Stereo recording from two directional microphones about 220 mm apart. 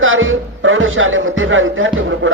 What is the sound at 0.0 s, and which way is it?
Speech, 65° right (ahead or behind).